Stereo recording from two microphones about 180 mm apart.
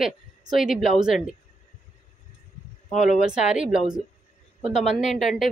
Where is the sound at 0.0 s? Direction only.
Centre (ahead or behind).